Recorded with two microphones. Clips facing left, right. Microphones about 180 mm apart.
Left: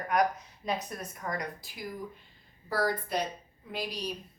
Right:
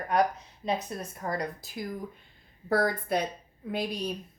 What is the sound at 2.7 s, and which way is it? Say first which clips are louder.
A woman's voice: right 4 dB; 55° right (ahead or behind).